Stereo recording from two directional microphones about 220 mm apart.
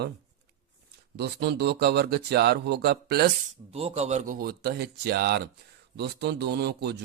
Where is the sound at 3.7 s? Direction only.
30° right (ahead or behind).